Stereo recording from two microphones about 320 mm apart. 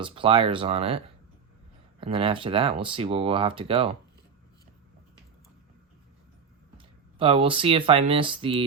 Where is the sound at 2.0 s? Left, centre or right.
Centre.